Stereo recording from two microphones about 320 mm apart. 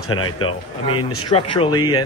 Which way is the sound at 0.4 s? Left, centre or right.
Centre.